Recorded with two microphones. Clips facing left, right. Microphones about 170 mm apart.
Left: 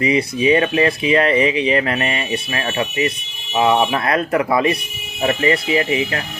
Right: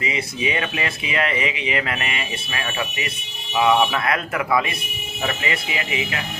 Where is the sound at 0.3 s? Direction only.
30° left (ahead or behind).